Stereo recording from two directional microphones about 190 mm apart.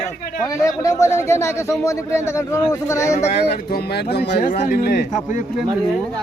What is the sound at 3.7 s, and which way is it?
Speech, 55° left (ahead or behind).